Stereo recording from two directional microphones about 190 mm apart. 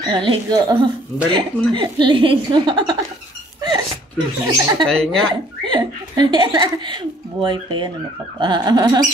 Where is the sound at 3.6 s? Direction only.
20° right (ahead or behind).